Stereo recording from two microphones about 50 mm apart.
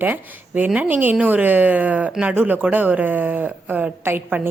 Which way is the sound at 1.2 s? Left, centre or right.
Right.